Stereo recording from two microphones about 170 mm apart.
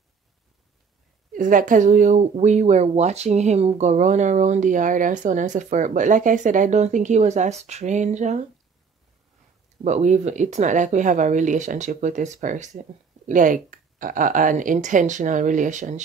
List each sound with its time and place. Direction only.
1.3 s speech: 50° right (ahead or behind)
9.8 s speech: 45° right (ahead or behind)